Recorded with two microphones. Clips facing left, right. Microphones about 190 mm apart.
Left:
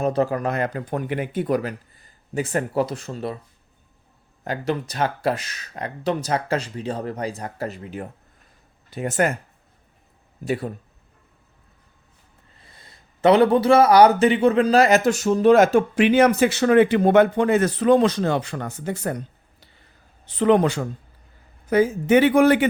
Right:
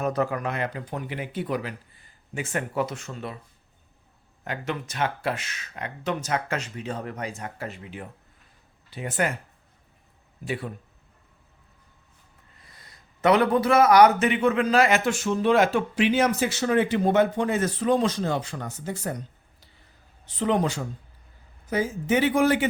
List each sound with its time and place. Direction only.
0.0 s speech: 30° left (ahead or behind)
4.4 s a man's voice: 35° left (ahead or behind)
10.4 s speech: 40° left (ahead or behind)
12.5 s a man's voice: 25° left (ahead or behind); by 22.6 s 60° left (ahead or behind)